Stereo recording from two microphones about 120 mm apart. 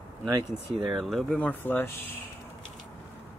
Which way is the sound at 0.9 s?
Centre (ahead or behind).